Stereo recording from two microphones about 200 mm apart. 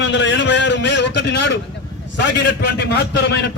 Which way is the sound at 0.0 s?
65° left (ahead or behind).